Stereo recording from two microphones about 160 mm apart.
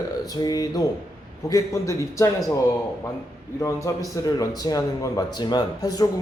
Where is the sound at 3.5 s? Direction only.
20° left (ahead or behind).